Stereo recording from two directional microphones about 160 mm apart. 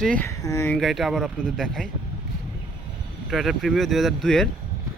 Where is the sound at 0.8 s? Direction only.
Centre (ahead or behind).